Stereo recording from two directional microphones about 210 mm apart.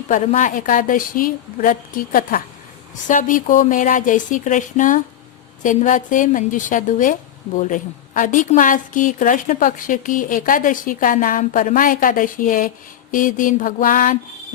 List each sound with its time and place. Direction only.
0.1 s a woman's voice: 35° left (ahead or behind)